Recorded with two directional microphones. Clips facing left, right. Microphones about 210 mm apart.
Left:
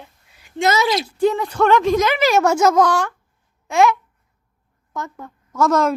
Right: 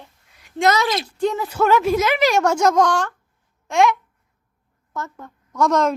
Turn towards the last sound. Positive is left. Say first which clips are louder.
# left 1 dB
turn(degrees=5)  # may be behind; listen again after turning